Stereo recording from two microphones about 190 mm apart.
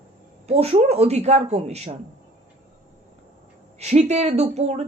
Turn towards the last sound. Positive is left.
turn(degrees=-35)  # may be behind; listen again after turning